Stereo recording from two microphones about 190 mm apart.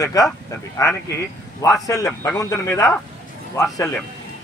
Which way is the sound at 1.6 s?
15° left (ahead or behind).